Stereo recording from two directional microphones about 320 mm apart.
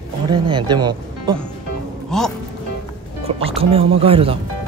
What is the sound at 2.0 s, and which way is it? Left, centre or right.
Speech, centre.